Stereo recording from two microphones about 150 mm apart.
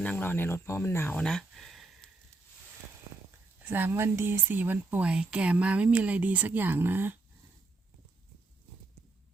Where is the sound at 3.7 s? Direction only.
15° right (ahead or behind).